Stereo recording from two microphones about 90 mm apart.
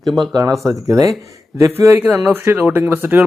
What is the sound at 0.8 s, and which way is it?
Speech, 35° right (ahead or behind).